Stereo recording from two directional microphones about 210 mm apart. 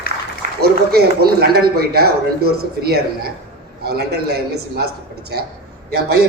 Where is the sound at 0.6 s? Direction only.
50° right (ahead or behind).